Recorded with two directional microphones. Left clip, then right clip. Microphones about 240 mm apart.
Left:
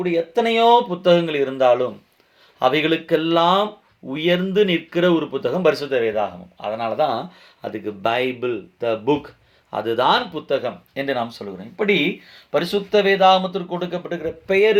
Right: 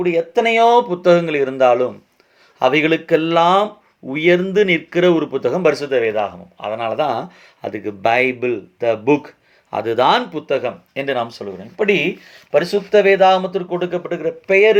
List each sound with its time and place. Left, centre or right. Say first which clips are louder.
0.0 s speech: right 4 dB; right